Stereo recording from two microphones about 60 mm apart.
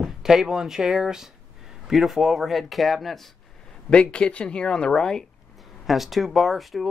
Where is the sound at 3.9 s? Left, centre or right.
Centre.